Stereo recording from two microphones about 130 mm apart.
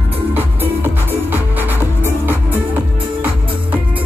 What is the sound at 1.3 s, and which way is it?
Music, 15° right (ahead or behind).